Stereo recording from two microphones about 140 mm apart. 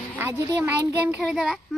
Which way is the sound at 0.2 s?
20° right (ahead or behind).